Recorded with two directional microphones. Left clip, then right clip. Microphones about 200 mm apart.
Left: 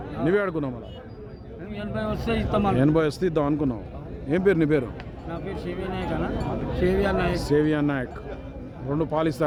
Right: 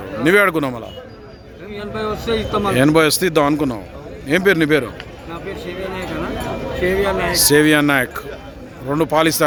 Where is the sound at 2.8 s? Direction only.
10° right (ahead or behind).